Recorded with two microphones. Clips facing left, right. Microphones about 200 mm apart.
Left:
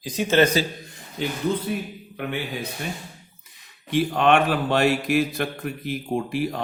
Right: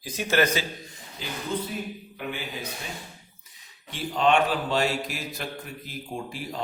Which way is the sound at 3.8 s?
60° left (ahead or behind).